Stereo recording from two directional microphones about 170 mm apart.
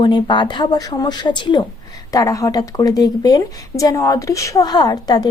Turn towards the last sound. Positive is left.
turn(degrees=25)  # may be behind; listen again after turning